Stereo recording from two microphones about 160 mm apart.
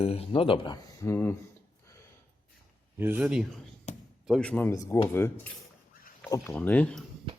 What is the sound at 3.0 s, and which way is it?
Speech, 10° right (ahead or behind).